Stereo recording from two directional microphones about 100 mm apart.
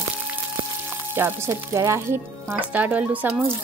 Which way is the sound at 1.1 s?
25° right (ahead or behind).